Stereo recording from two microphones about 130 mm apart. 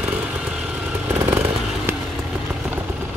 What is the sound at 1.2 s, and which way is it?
Vehicle, 20° right (ahead or behind).